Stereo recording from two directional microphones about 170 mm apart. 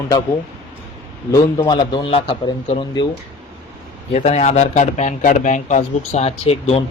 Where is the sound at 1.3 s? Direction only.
20° left (ahead or behind).